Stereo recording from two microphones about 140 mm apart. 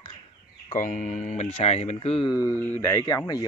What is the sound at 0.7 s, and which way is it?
Speech, 65° left (ahead or behind).